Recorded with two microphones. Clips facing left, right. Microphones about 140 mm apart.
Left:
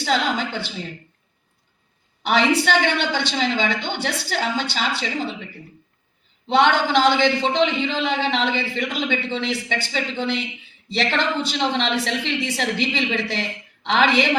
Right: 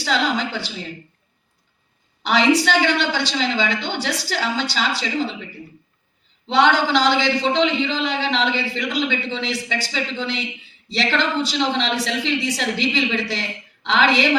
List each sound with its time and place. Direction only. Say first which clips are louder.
0.0 s a woman's voice: even; 55° left (ahead or behind)
2.2 s a man's voice: right 2 dB; 55° left (ahead or behind)
6.5 s a man's voice: even; 55° left (ahead or behind)